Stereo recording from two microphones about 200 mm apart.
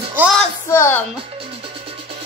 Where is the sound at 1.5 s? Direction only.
25° right (ahead or behind).